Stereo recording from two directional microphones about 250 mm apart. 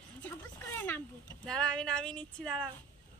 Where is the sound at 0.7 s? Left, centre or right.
Centre.